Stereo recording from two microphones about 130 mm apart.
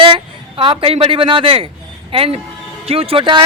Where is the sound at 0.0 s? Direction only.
40° right (ahead or behind).